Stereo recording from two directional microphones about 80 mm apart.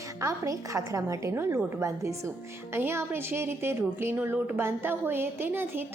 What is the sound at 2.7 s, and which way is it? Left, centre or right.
A woman's voice, right.